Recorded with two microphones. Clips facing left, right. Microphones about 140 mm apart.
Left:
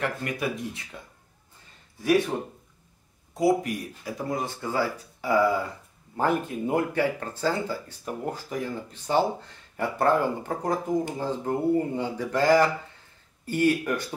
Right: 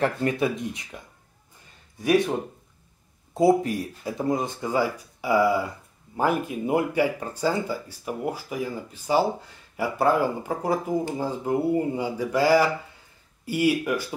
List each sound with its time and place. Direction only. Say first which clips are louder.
0.0 s speech: right 5 dB; 30° right (ahead or behind)
3.3 s speech: right 4 dB; 25° right (ahead or behind); by 14.0 s 5° right (ahead or behind)